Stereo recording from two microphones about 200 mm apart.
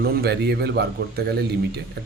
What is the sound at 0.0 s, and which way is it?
Speech, 55° right (ahead or behind).